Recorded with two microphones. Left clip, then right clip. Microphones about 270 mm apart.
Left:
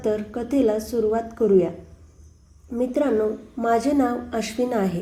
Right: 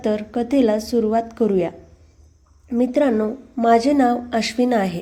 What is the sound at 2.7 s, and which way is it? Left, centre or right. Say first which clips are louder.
A woman's voice: right 4 dB; right.